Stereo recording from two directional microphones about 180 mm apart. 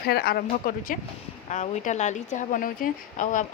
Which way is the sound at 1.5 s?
40° left (ahead or behind).